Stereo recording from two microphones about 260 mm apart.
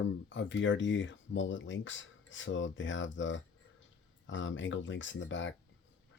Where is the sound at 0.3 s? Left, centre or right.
Left.